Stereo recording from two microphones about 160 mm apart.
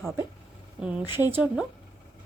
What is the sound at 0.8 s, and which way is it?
Speech, 5° right (ahead or behind).